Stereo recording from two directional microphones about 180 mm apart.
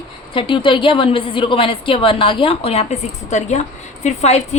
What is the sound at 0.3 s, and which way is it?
A woman's voice, 30° left (ahead or behind).